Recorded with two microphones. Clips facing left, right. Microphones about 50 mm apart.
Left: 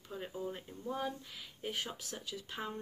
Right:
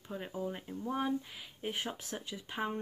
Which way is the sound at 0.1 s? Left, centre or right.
Centre.